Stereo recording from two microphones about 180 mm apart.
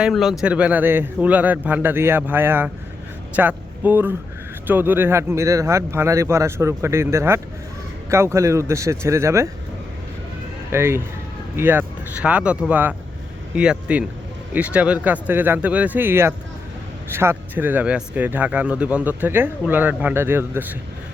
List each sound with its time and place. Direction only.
0.0 s speech: centre (ahead or behind)
10.7 s speech: 15° right (ahead or behind)